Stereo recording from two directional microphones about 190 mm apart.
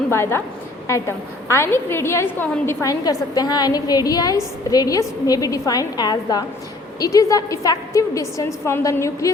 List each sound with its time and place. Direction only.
0.1 s a woman's voice: 15° left (ahead or behind)